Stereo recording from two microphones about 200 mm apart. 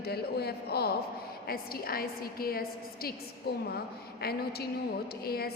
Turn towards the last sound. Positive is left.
turn(degrees=50)  # may be behind; listen again after turning